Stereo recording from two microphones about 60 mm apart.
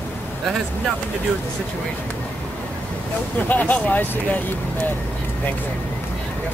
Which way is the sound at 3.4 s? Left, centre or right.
Left.